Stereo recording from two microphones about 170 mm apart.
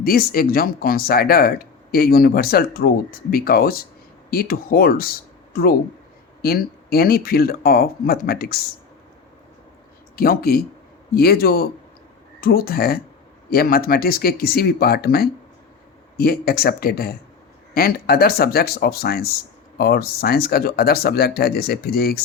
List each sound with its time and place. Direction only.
0.0 s speech: 60° left (ahead or behind)
10.2 s speech: 60° left (ahead or behind)